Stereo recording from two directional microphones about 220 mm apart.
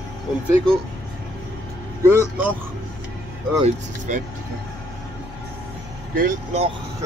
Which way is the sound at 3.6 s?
35° right (ahead or behind).